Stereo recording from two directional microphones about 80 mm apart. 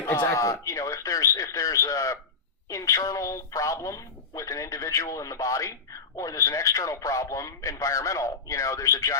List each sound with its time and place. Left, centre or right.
0.0 s speech: left